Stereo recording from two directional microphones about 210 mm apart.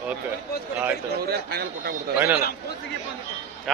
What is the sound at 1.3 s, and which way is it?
Speech, 50° right (ahead or behind).